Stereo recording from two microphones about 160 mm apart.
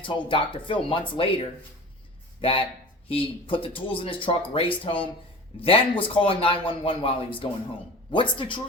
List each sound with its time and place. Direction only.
0.0 s speech: 30° left (ahead or behind)
2.4 s speech: 35° left (ahead or behind)